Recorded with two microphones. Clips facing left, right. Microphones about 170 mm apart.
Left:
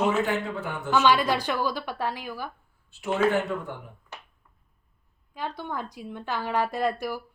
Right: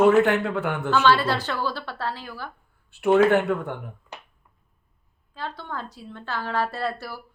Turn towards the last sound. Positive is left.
turn(degrees=15)  # may be behind; listen again after turning